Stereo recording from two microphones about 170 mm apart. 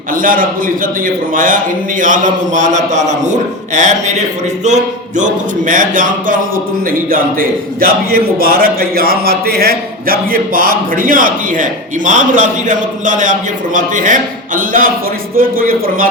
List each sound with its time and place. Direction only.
0.1 s a man's voice: 55° right (ahead or behind)